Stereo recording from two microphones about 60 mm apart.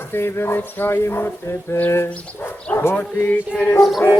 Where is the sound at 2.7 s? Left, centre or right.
Left.